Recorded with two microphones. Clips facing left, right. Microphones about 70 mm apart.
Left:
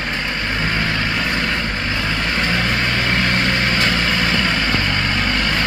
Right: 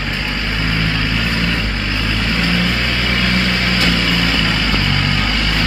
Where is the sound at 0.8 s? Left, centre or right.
Left.